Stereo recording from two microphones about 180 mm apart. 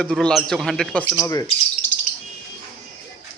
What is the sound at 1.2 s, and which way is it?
Speech, 15° left (ahead or behind).